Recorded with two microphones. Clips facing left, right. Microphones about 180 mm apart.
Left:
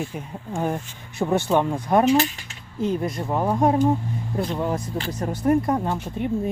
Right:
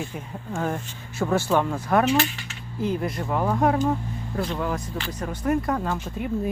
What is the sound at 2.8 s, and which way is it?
Speech, 25° left (ahead or behind).